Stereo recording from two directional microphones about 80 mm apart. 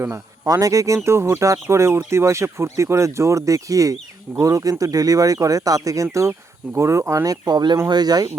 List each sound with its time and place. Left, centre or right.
0.4 s speech: right